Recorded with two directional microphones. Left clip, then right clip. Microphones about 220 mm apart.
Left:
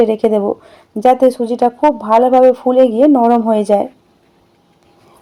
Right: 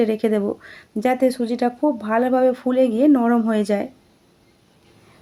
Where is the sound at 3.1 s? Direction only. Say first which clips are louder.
Left 8 dB; 50° left (ahead or behind).